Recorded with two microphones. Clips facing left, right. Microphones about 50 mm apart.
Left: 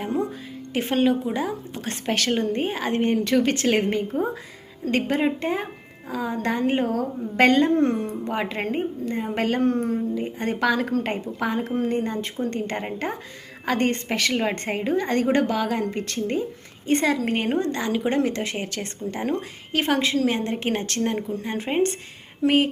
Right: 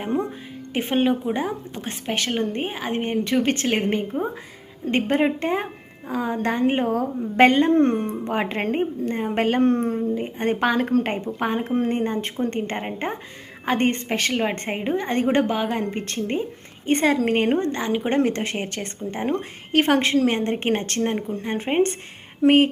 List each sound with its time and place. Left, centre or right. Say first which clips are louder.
0.0 s a woman's voice: right 1 dB; right
0.8 s speech: even; centre
1.7 s speech: left 2 dB; centre
2.1 s speech: left 1 dB; right
3.4 s a woman's voice: left 1 dB; right
4.9 s a woman's voice: right 2 dB; right
8.3 s a woman's voice: right 3 dB; right
17.6 s speech: right 1 dB; right
18.1 s a woman's voice: right 2 dB; right
19.7 s a woman's voice: right 4 dB; right